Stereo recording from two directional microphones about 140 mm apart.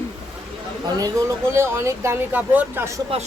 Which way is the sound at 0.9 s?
25° right (ahead or behind).